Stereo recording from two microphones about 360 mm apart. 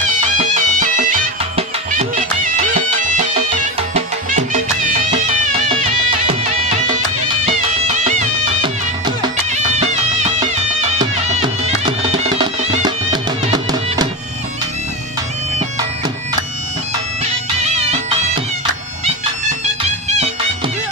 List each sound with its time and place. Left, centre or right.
0.4 s music: right
2.5 s music: centre
17.7 s music: centre
19.8 s music: centre